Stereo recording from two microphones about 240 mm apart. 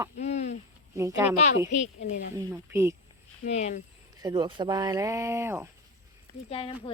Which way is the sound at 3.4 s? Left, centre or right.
Left.